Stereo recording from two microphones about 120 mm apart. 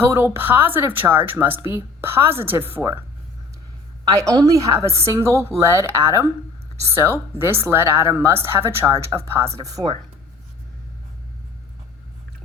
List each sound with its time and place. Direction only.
0.0 s a woman's voice: 20° right (ahead or behind)
4.2 s a woman's voice: 30° right (ahead or behind)